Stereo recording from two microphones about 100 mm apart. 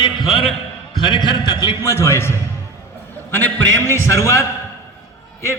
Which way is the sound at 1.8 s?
30° left (ahead or behind).